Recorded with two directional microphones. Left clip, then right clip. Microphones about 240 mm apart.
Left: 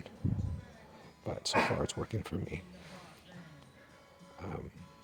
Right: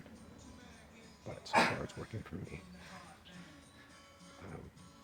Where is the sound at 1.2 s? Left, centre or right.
Left.